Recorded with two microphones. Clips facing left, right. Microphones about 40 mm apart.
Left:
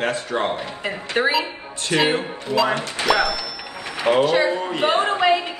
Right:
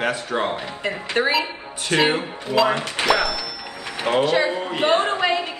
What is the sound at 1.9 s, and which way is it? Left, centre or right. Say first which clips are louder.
Speech: even; right.